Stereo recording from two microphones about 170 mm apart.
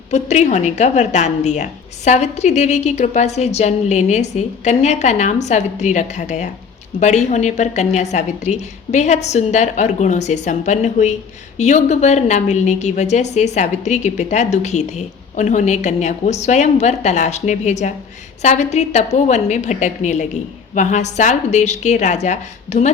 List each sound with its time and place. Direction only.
0.1 s a woman's voice: 45° left (ahead or behind)